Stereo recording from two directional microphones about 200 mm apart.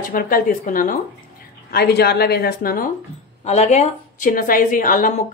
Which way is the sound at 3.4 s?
35° left (ahead or behind).